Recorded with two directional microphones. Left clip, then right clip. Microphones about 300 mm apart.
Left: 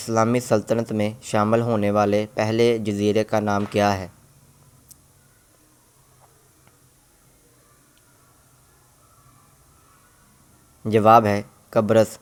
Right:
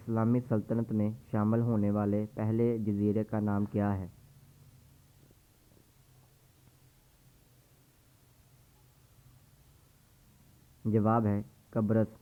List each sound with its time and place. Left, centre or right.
0.0 s speech: centre
10.9 s speech: centre